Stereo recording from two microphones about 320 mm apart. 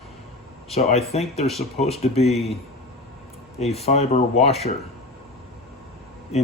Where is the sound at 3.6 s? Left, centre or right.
Centre.